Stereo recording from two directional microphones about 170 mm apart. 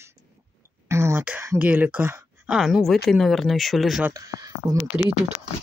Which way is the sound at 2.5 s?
Centre (ahead or behind).